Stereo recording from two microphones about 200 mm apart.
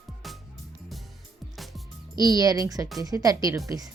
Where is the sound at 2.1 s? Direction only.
20° right (ahead or behind).